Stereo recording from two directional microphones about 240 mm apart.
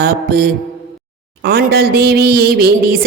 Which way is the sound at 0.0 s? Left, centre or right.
Right.